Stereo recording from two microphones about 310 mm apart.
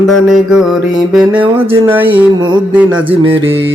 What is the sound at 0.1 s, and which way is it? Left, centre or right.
Mantra, centre.